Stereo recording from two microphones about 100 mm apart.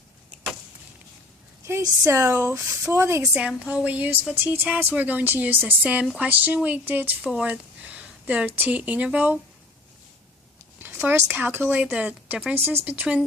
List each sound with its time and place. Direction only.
2.0 s speech: 25° right (ahead or behind)
3.3 s speech: 10° right (ahead or behind)
10.8 s speech: 20° right (ahead or behind)